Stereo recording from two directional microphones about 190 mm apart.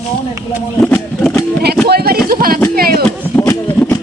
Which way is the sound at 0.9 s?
5° left (ahead or behind).